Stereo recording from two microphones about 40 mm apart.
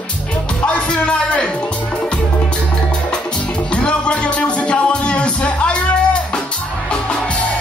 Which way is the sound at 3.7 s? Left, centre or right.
Left.